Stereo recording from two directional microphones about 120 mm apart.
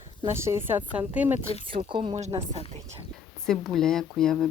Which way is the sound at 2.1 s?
60° right (ahead or behind).